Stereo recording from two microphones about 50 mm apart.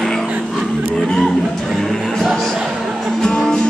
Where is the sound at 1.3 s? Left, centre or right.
Centre.